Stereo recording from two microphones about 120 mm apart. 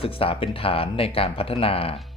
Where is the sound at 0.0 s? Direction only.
50° left (ahead or behind).